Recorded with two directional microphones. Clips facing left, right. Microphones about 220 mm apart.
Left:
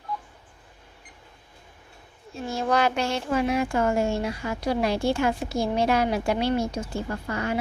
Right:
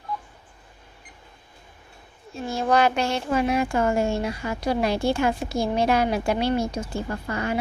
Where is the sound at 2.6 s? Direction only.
20° right (ahead or behind).